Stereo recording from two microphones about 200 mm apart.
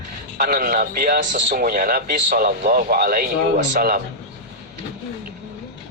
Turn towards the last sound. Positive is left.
turn(degrees=-45)  # may be behind; listen again after turning